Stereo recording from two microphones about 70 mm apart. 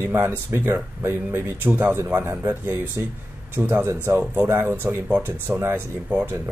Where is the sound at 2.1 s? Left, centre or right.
Right.